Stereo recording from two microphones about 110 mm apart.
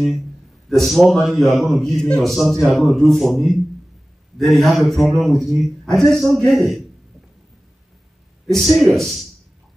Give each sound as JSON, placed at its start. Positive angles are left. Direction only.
{"t": 0.7, "sound": "a man's voice", "side_deg": 0}
{"t": 8.5, "sound": "a man's voice", "side_deg": 0}